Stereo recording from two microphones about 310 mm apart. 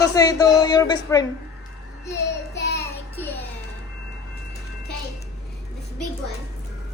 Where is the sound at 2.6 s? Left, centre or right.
Left.